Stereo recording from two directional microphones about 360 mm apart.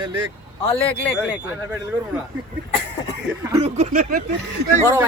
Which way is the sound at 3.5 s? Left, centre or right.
Centre.